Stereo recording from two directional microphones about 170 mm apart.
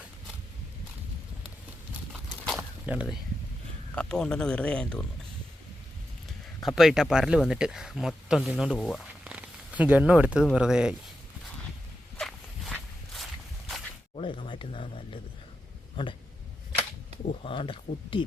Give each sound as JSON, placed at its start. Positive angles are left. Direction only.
{"t": 2.6, "sound": "a sound", "side_deg": -10}
{"t": 3.9, "sound": "speech", "side_deg": 5}
{"t": 6.6, "sound": "speech", "side_deg": 0}
{"t": 9.2, "sound": "a sound", "side_deg": -10}
{"t": 10.4, "sound": "speech", "side_deg": -5}
{"t": 12.1, "sound": "walk", "side_deg": 5}
{"t": 14.2, "sound": "a sound", "side_deg": 30}
{"t": 16.0, "sound": "speech", "side_deg": 30}
{"t": 17.4, "sound": "speech", "side_deg": 30}